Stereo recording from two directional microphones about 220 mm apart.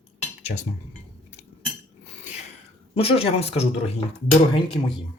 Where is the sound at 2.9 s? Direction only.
25° left (ahead or behind).